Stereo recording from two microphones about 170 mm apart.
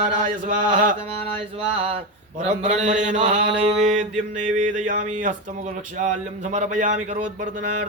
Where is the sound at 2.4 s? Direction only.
40° right (ahead or behind).